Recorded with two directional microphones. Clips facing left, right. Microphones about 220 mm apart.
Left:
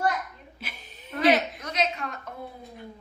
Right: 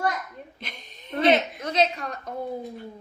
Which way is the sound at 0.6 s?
5° left (ahead or behind).